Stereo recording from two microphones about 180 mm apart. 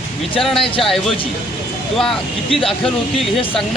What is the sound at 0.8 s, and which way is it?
Speech, centre (ahead or behind).